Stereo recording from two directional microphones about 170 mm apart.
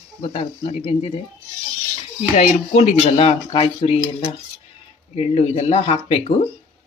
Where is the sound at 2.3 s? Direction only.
40° left (ahead or behind).